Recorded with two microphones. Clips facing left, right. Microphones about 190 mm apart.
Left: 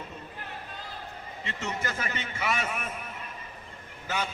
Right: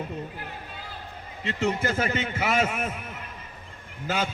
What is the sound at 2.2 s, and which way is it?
Speech, 45° right (ahead or behind).